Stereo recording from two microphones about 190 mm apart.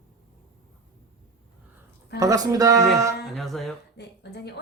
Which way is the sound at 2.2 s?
20° right (ahead or behind).